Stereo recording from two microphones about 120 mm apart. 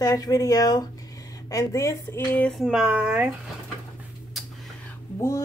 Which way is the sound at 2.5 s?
5° right (ahead or behind).